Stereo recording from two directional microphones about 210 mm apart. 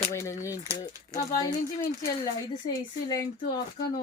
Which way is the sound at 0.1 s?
15° left (ahead or behind).